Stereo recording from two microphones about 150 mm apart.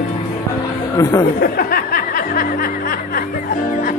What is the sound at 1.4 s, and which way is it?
Music, 75° left (ahead or behind).